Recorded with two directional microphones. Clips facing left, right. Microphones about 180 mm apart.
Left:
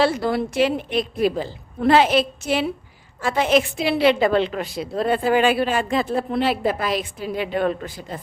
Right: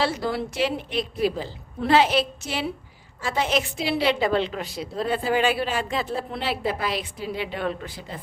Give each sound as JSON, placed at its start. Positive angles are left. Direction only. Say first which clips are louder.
{"t": 0.0, "sound": "a woman's voice", "louder": "left 5 dB", "side_deg": 55}